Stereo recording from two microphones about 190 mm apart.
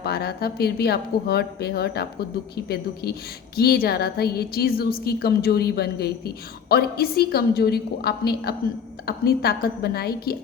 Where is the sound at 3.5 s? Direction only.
55° left (ahead or behind).